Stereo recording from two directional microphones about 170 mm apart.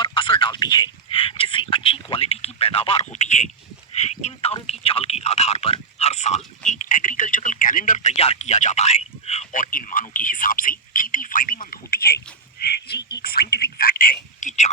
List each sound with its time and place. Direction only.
0.0 s speech: 30° left (ahead or behind)
3.9 s telephone: 40° left (ahead or behind)
6.7 s radio: 45° left (ahead or behind); by 12.2 s 65° left (ahead or behind)
12.9 s frog: 70° left (ahead or behind)
13.2 s a sound: 65° left (ahead or behind); by 14.7 s 45° left (ahead or behind)